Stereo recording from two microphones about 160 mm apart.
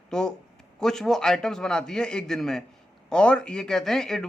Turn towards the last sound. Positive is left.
turn(degrees=5)  # may be behind; listen again after turning